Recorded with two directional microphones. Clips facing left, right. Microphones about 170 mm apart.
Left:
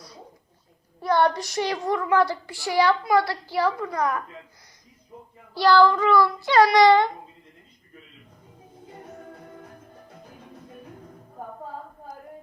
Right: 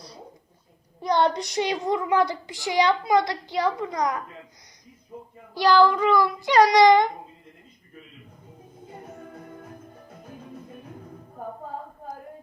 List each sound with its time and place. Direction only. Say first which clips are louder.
1.0 s a woman's voice: left 1 dB; 20° right (ahead or behind)
5.5 s speech: left 1 dB; 15° right (ahead or behind)